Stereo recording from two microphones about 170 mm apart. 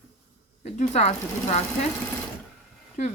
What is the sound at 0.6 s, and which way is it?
Speech, 40° left (ahead or behind).